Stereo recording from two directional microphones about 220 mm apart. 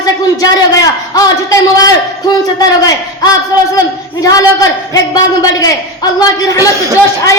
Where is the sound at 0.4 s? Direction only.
15° left (ahead or behind).